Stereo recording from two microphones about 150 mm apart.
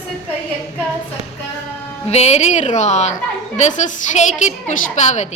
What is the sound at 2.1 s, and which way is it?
A woman's voice, 45° left (ahead or behind).